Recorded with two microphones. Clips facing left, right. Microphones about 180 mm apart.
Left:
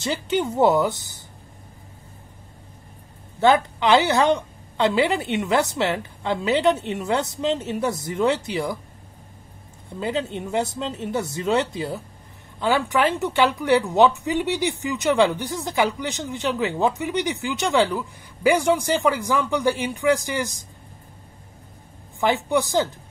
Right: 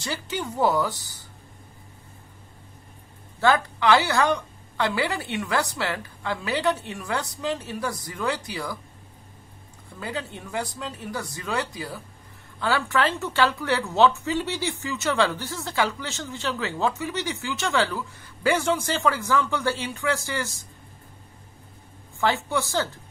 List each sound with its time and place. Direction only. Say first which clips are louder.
0.0 s a woman's voice: left 7 dB; 20° left (ahead or behind)
3.3 s a woman's voice: left 4 dB; 20° left (ahead or behind)
9.9 s a woman's voice: left 7 dB; 20° left (ahead or behind)
22.2 s speech: left 4 dB; 15° left (ahead or behind)